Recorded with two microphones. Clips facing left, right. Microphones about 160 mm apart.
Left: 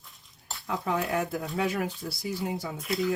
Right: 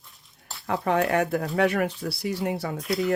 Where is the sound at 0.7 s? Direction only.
70° right (ahead or behind).